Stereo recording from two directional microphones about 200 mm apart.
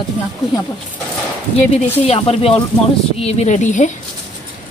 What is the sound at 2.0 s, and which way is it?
A woman's voice, 30° left (ahead or behind).